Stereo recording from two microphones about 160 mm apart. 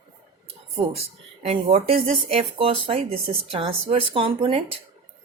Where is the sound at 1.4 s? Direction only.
40° right (ahead or behind).